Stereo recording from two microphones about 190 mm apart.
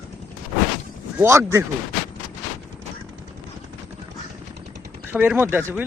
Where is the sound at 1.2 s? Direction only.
15° right (ahead or behind).